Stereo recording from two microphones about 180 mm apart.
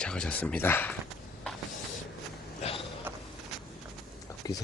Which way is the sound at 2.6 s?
30° left (ahead or behind).